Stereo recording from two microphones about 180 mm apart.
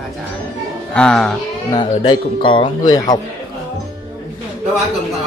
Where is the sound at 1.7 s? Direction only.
25° left (ahead or behind).